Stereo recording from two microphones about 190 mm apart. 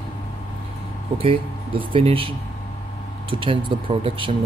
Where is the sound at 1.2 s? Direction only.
30° right (ahead or behind).